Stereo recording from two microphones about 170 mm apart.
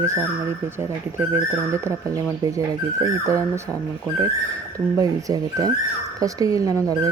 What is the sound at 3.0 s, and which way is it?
Speech, 20° right (ahead or behind).